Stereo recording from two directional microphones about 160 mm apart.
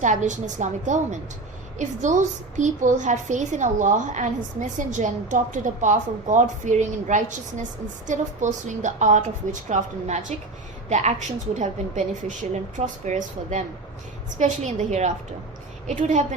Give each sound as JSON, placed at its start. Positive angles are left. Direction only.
{"t": 0.0, "sound": "a woman's voice", "side_deg": -50}